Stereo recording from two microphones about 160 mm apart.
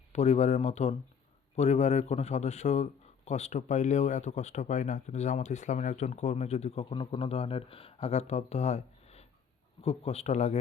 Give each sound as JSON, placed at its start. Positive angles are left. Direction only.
{"t": 0.1, "sound": "a man's voice", "side_deg": 45}